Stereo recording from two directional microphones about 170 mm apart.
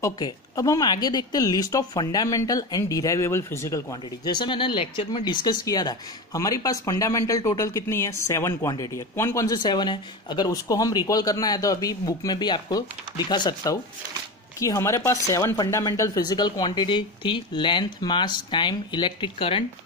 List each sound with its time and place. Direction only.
0.0 s speech: 20° left (ahead or behind)